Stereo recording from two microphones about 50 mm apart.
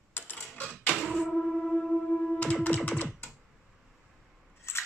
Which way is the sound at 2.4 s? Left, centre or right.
Left.